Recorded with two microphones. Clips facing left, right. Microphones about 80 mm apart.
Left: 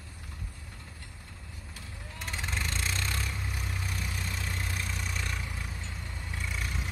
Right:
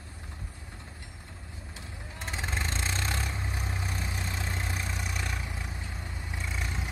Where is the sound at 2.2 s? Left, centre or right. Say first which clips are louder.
Right 1 dB; right.